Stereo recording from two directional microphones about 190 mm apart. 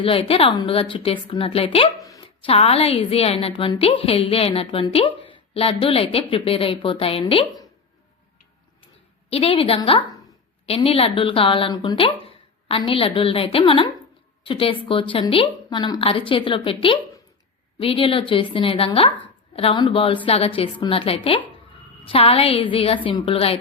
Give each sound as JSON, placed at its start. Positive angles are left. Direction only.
{"t": 0.0, "sound": "a woman's voice", "side_deg": 30}
{"t": 9.3, "sound": "a woman's voice", "side_deg": 30}